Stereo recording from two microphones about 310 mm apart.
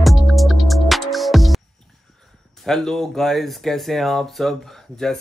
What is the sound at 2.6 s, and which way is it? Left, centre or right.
Speech, centre.